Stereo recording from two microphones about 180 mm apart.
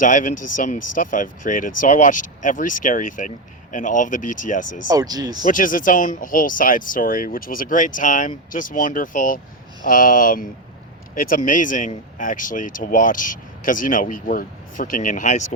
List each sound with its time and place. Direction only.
0.0 s speech: 45° left (ahead or behind)
4.9 s speech: 20° right (ahead or behind)
5.5 s speech: 50° left (ahead or behind)